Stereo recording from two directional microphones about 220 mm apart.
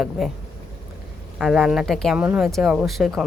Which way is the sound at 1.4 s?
Centre (ahead or behind).